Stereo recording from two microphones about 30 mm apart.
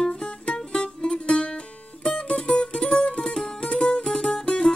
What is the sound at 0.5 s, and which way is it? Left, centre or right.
Music, left.